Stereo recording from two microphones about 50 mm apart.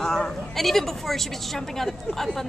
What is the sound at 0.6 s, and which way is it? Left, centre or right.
Speech, centre.